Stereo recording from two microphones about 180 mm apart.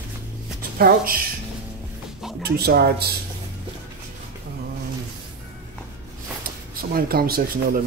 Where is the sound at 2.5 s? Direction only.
60° right (ahead or behind).